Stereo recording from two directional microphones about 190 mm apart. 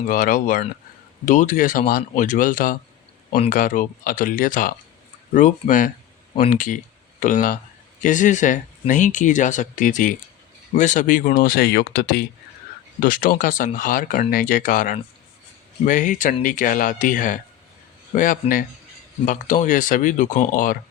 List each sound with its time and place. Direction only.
0.1 s speech: 45° left (ahead or behind)